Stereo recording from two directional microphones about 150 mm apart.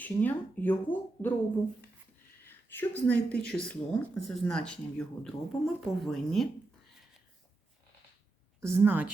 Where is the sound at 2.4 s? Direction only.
15° left (ahead or behind).